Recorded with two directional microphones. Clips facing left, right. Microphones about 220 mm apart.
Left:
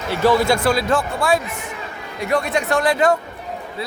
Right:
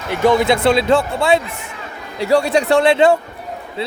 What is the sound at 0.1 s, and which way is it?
Speech, 15° right (ahead or behind).